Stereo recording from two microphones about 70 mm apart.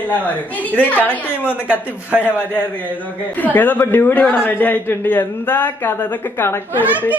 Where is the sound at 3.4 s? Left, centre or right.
Left.